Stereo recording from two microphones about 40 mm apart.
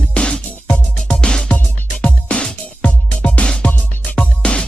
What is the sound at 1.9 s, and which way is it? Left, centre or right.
Music, left.